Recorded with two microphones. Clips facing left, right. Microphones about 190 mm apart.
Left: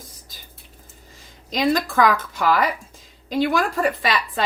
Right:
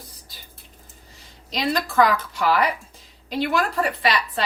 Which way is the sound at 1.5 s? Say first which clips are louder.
Left 4 dB; 50° left (ahead or behind).